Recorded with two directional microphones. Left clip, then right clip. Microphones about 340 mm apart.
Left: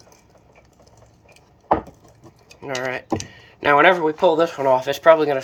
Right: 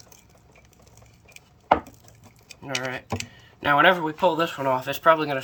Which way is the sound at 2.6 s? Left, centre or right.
Centre.